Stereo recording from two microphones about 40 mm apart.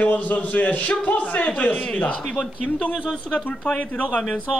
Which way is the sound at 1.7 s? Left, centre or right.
Left.